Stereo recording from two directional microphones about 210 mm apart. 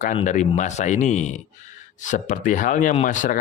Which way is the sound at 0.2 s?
35° left (ahead or behind).